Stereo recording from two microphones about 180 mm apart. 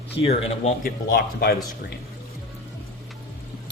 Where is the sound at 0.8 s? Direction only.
50° left (ahead or behind).